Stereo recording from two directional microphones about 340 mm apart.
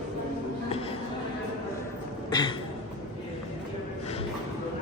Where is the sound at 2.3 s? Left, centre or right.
Centre.